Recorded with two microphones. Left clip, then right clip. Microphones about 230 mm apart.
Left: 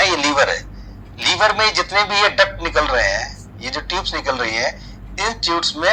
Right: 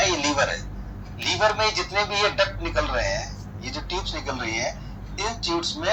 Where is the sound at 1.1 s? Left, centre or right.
Left.